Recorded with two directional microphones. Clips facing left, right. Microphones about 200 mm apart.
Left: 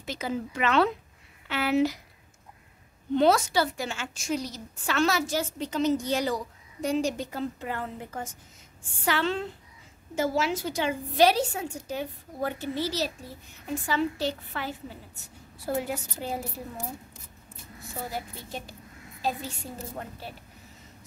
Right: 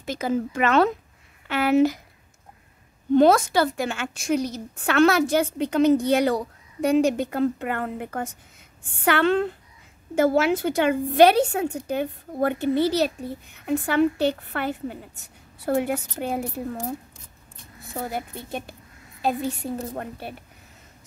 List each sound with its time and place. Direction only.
0.0 s speech: 50° right (ahead or behind)
3.2 s a woman's voice: 50° right (ahead or behind)
17.9 s a woman's voice: 55° right (ahead or behind)